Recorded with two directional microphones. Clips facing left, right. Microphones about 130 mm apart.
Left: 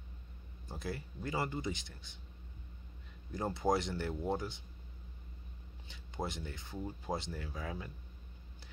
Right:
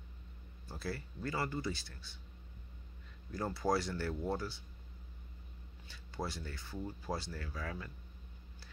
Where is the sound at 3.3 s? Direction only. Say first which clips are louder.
Left 1 dB; 20° left (ahead or behind).